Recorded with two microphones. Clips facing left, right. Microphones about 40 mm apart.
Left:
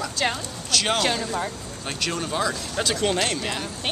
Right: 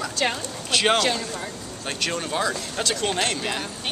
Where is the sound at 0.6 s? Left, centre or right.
Centre.